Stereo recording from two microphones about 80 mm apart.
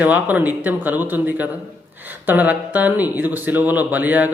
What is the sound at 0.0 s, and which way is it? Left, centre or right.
A man's voice, right.